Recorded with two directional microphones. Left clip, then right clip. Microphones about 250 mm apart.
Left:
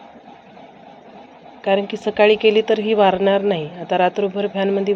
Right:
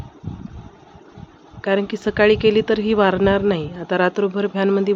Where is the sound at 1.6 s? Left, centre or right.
Centre.